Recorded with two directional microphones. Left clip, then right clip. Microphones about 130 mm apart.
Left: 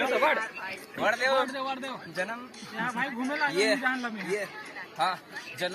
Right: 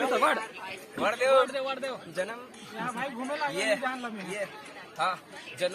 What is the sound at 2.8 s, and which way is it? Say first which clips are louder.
Speech: left 3 dB; 25° right (ahead or behind).